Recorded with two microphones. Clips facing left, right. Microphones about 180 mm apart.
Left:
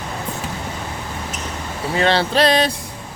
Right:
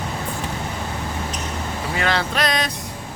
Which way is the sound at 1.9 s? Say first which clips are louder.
Left 6 dB; 30° left (ahead or behind).